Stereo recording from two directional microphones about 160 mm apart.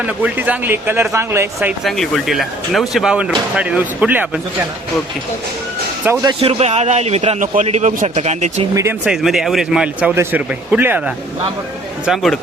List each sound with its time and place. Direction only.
0.0 s speech: 10° right (ahead or behind)
1.8 s speech: centre (ahead or behind)
6.2 s a man's voice: 35° right (ahead or behind)
8.7 s speech: 20° right (ahead or behind)
9.0 s speech: centre (ahead or behind)
12.0 s speech: centre (ahead or behind)